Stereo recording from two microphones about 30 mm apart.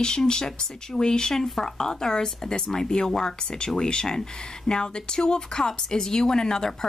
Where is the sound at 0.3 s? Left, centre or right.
Left.